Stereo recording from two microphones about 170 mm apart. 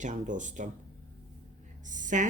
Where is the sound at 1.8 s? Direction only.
50° right (ahead or behind).